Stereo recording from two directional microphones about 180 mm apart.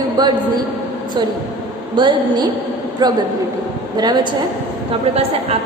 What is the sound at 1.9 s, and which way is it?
A woman's voice, 25° right (ahead or behind).